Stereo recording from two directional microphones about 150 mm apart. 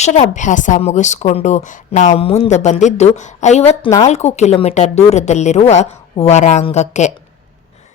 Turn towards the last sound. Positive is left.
turn(degrees=50)  # may be behind; listen again after turning